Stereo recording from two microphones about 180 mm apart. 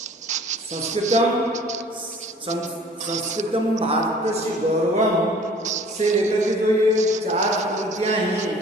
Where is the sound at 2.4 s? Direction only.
40° right (ahead or behind).